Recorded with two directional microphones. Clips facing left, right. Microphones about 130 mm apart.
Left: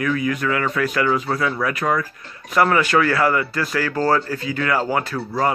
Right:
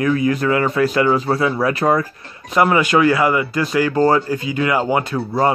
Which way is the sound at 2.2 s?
20° right (ahead or behind).